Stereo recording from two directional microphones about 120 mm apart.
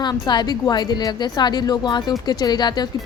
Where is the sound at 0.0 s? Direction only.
35° left (ahead or behind).